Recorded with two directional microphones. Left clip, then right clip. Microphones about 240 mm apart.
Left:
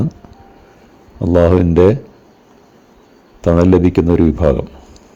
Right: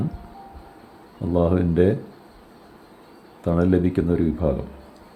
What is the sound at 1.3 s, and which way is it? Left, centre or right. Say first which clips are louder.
Speech: left 10 dB; left.